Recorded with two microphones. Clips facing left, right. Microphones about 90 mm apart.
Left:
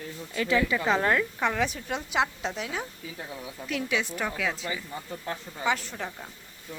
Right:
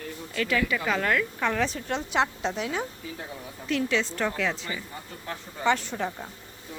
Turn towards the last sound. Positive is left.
turn(degrees=0)  # may be behind; listen again after turning